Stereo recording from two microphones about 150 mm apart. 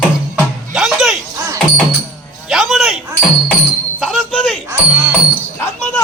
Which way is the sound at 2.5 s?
Centre (ahead or behind).